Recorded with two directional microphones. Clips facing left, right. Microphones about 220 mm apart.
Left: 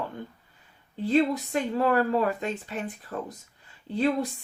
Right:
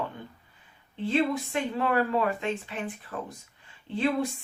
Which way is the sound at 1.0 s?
40° left (ahead or behind).